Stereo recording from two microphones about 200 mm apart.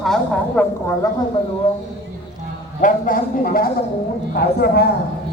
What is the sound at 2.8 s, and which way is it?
Speech, 45° left (ahead or behind).